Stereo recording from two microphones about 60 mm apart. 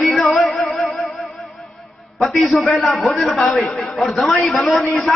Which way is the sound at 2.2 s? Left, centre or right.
Centre.